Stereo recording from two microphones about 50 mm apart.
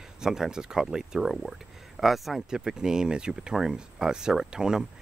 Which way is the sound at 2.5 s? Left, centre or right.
Centre.